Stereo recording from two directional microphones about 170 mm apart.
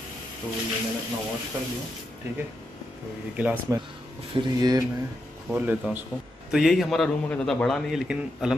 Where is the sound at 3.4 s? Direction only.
10° right (ahead or behind).